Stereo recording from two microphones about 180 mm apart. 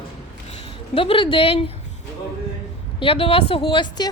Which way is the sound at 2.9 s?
30° left (ahead or behind).